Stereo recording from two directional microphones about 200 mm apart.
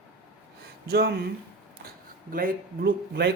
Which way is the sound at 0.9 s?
55° right (ahead or behind).